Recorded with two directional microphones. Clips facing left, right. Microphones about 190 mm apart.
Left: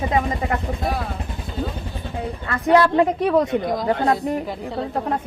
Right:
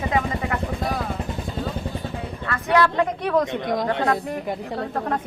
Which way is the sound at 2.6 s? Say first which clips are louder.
Left 4 dB; 30° left (ahead or behind).